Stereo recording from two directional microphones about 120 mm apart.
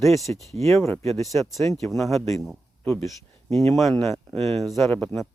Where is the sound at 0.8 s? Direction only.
25° left (ahead or behind).